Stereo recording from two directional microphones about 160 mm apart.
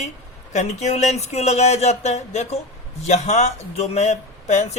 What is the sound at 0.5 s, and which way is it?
Speech, 45° left (ahead or behind).